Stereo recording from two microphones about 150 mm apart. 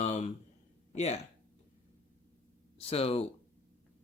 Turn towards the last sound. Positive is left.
turn(degrees=40)  # may be behind; listen again after turning